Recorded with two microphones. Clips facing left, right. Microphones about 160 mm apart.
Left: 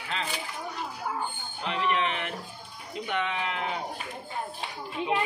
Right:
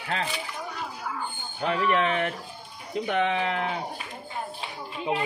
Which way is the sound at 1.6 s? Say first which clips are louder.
Right 4 dB; 45° right (ahead or behind).